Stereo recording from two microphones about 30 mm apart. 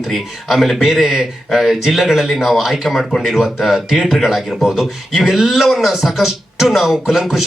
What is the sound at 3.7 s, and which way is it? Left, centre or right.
Speech, right.